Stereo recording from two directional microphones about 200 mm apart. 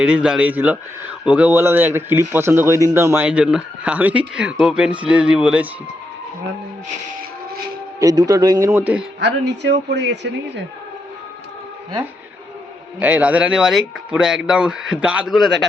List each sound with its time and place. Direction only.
0.0 s a man's voice: 5° right (ahead or behind)
7.9 s a man's voice: 15° right (ahead or behind)
9.2 s speech: 60° right (ahead or behind)
13.0 s speech: 5° right (ahead or behind)